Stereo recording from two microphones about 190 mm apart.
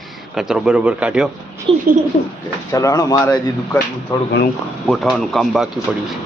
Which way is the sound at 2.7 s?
20° left (ahead or behind).